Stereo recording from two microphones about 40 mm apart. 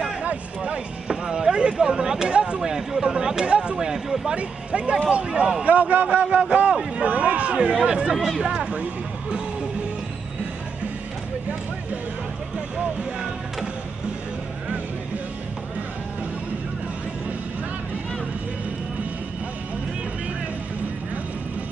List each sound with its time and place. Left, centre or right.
0.2 s speech: right
2.6 s speech: centre
3.7 s speech: centre
4.4 s speech: right
5.7 s speech: right